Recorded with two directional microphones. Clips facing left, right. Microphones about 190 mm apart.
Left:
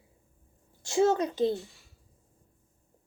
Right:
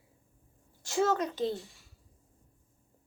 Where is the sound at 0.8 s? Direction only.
25° left (ahead or behind).